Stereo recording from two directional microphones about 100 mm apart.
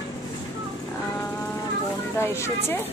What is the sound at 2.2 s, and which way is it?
Speech, 25° left (ahead or behind).